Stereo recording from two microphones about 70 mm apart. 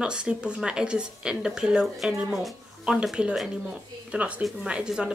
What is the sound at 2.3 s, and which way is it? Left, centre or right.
Speech, centre.